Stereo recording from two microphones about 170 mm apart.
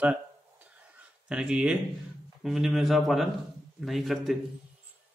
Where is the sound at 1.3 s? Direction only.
5° right (ahead or behind).